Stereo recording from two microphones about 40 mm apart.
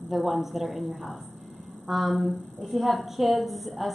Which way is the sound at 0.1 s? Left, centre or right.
Centre.